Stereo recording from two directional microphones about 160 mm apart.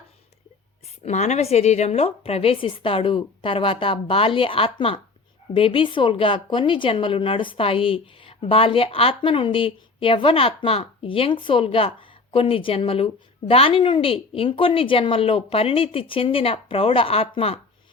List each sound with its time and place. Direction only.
1.0 s speech: 45° left (ahead or behind)